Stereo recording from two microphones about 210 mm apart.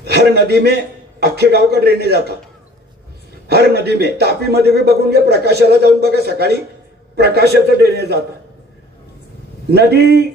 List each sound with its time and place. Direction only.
0.0 s a man's voice: 50° right (ahead or behind)
3.4 s a man's voice: 50° right (ahead or behind)
9.7 s a man's voice: 50° right (ahead or behind)